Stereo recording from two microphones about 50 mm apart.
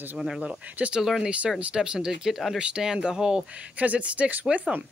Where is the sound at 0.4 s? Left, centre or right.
Right.